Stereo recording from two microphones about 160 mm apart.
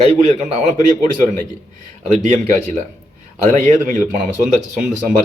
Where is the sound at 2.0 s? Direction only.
50° right (ahead or behind).